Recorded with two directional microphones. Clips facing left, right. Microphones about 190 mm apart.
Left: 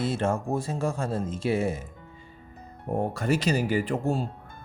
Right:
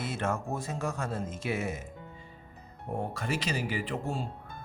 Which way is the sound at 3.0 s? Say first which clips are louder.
Left 7 dB; 40° left (ahead or behind).